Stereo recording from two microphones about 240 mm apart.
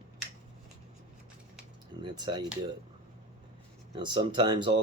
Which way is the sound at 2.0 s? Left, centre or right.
Centre.